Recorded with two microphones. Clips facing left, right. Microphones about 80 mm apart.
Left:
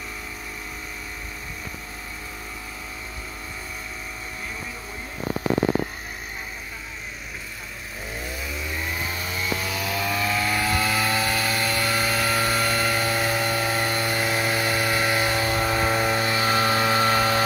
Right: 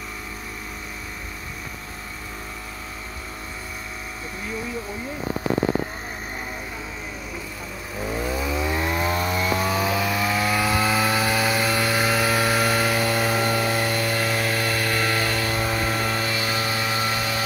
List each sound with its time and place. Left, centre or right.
8.6 s chainsaw: right
9.2 s chainsaw: right
9.8 s chainsaw: centre
13.7 s power tool: centre
16.3 s a sound: left